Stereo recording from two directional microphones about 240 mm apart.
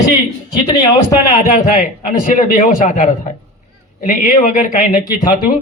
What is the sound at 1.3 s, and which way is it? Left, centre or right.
A man's voice, left.